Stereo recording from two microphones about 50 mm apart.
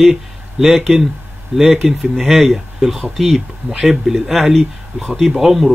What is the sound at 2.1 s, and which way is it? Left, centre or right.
A man's voice, centre.